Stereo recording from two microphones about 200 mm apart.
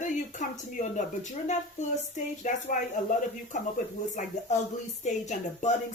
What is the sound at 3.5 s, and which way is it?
Speech, 40° left (ahead or behind).